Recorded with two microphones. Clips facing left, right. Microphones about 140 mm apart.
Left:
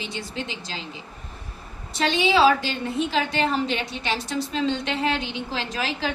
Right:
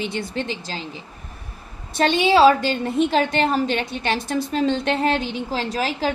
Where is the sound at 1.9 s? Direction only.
55° right (ahead or behind).